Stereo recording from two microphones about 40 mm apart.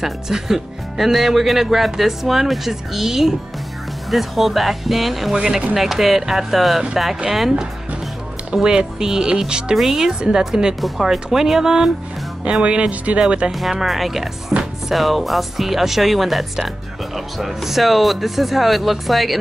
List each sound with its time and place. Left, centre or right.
0.0 s speech: centre
8.6 s speech: centre
9.8 s speech: centre
12.4 s speech: right
13.5 s speech: centre